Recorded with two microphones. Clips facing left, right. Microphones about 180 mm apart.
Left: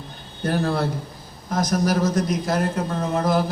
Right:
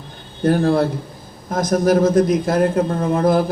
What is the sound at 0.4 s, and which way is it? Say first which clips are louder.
A man's voice: right 7 dB; 50° right (ahead or behind).